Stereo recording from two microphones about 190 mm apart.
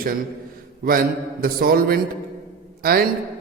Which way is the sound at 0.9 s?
50° right (ahead or behind).